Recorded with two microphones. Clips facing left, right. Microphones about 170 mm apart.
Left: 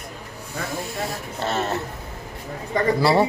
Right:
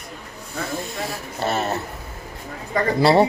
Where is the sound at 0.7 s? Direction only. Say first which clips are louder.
Right 1 dB; 10° left (ahead or behind).